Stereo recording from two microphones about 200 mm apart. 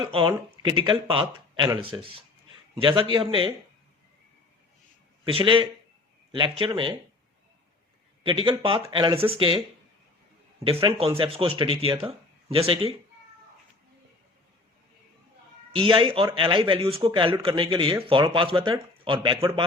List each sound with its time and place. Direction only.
0.0 s speech: 25° right (ahead or behind)
5.2 s speech: 25° right (ahead or behind)
8.2 s speech: 25° right (ahead or behind)
15.7 s speech: 25° right (ahead or behind)